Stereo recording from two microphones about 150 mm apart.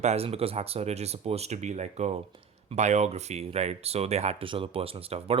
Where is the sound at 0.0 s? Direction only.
45° right (ahead or behind).